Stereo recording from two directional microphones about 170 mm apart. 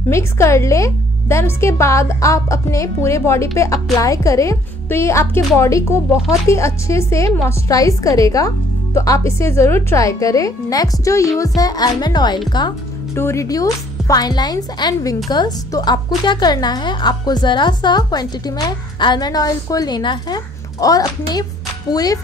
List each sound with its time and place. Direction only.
0.1 s a woman's voice: 15° left (ahead or behind)
12.5 s music: 25° left (ahead or behind)
13.2 s a woman's voice: 15° left (ahead or behind)